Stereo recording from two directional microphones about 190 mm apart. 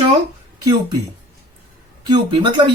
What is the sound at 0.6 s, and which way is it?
Speech, 20° right (ahead or behind).